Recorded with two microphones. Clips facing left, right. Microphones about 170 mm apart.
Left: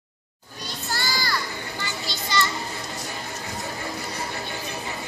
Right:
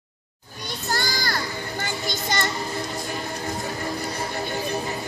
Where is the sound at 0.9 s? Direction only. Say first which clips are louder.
Right 1 dB; 50° right (ahead or behind).